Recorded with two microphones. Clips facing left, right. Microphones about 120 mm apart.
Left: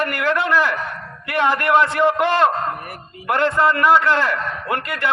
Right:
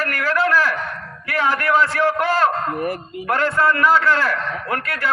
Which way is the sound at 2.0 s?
20° left (ahead or behind).